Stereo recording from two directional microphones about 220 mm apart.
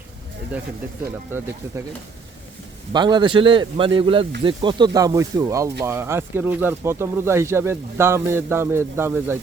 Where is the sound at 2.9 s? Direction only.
20° right (ahead or behind).